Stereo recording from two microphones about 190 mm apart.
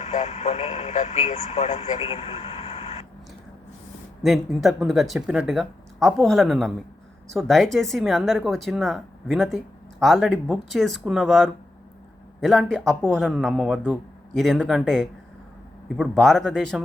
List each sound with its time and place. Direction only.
0.0 s speech: 35° left (ahead or behind)
4.2 s speech: centre (ahead or behind)